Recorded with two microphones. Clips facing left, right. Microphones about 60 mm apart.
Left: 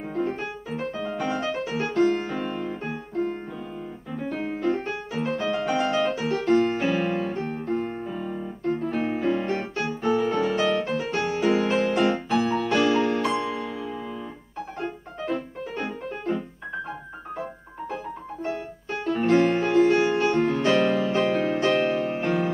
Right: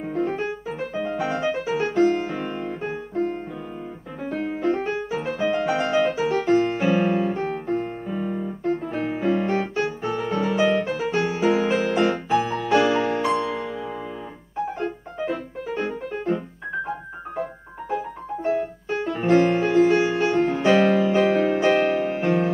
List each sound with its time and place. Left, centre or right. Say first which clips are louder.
0.0 s music: right 3 dB; centre
4.2 s piano: right 2 dB; centre
4.6 s music: right 4 dB; centre
15.2 s music: right 1 dB; centre
17.4 s piano: right 5 dB; centre
19.0 s music: right 1 dB; centre